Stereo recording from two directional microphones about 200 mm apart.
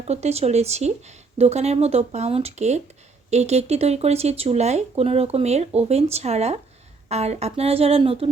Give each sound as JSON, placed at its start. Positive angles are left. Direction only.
{"t": 0.1, "sound": "a woman's voice", "side_deg": -30}